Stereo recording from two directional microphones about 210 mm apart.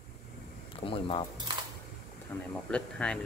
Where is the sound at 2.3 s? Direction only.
10° left (ahead or behind).